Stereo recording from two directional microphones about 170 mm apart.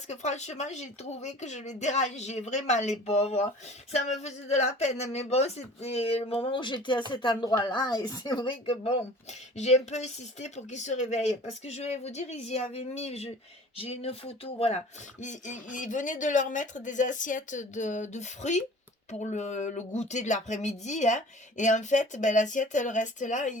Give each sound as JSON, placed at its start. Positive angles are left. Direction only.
{"t": 0.1, "sound": "speech", "side_deg": 45}
{"t": 15.2, "sound": "speech", "side_deg": 45}